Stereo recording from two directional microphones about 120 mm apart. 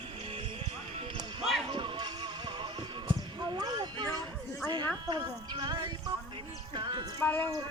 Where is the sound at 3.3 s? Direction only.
35° right (ahead or behind).